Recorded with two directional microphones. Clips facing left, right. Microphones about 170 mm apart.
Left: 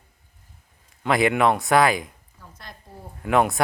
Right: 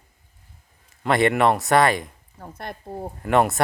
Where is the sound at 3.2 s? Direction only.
Centre (ahead or behind).